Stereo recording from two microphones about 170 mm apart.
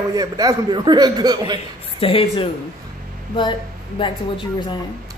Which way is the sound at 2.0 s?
30° left (ahead or behind).